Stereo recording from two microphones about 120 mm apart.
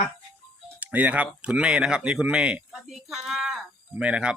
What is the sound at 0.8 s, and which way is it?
Speech, 15° right (ahead or behind).